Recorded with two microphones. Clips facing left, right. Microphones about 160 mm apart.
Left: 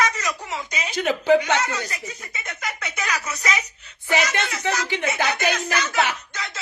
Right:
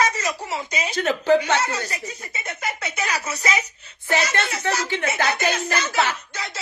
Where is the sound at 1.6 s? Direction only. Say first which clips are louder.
Right 1 dB; 30° right (ahead or behind).